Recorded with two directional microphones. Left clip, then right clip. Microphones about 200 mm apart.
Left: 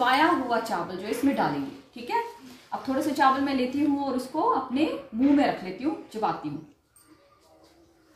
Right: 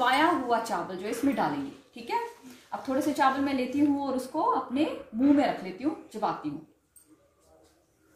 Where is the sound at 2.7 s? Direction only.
5° right (ahead or behind).